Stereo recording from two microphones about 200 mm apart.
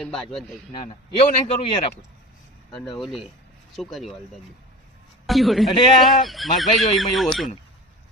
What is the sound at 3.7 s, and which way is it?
Speech, centre (ahead or behind).